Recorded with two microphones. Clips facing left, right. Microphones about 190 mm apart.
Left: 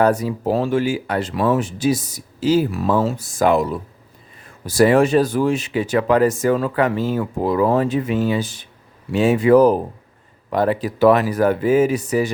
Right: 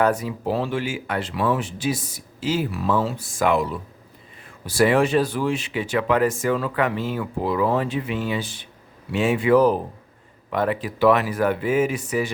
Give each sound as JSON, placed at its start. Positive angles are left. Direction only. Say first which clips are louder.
{"t": 0.0, "sound": "speech", "louder": "left 4 dB", "side_deg": 40}